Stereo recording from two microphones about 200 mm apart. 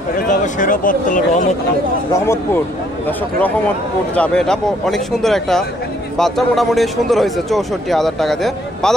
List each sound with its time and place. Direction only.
0.2 s speech: 40° left (ahead or behind)
2.2 s speech: 10° left (ahead or behind)
4.1 s speech: 5° left (ahead or behind)